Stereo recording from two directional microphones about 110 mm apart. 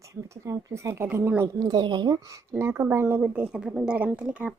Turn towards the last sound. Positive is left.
turn(degrees=-10)  # may be behind; listen again after turning